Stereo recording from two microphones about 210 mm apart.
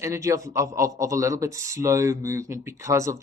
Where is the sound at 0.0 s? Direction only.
15° right (ahead or behind).